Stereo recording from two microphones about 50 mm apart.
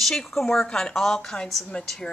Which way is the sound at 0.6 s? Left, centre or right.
Centre.